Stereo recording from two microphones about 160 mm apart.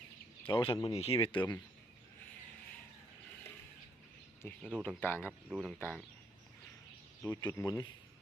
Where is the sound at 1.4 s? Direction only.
15° left (ahead or behind).